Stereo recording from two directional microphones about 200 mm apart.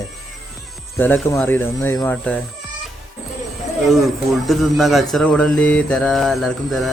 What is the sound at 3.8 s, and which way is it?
Speech, centre (ahead or behind).